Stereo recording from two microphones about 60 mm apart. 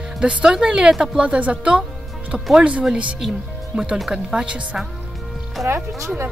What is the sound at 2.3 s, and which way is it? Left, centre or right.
Speech, centre.